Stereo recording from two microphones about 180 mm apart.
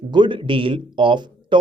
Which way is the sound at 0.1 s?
25° right (ahead or behind).